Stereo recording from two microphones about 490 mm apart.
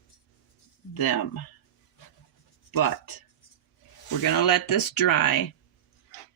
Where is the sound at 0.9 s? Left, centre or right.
Left.